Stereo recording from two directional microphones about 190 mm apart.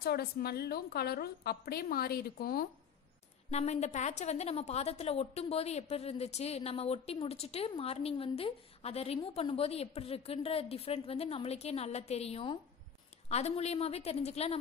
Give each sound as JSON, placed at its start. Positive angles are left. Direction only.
{"t": 0.0, "sound": "a woman's voice", "side_deg": 55}
{"t": 3.4, "sound": "a woman's voice", "side_deg": 35}